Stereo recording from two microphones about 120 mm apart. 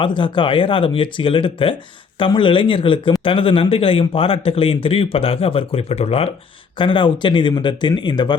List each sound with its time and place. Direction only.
0.0 s a man's voice: 45° left (ahead or behind)
6.7 s speech: 45° left (ahead or behind)